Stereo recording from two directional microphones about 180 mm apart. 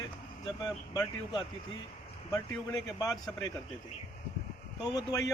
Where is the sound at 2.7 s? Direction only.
20° left (ahead or behind).